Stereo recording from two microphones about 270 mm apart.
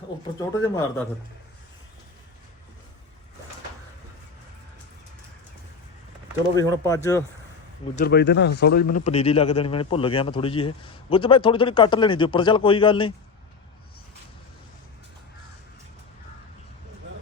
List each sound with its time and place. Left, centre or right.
0.3 s speech: centre
6.6 s speech: centre
7.9 s a man's voice: left; by 13.1 s centre